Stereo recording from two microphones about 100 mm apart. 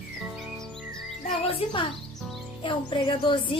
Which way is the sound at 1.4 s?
60° left (ahead or behind).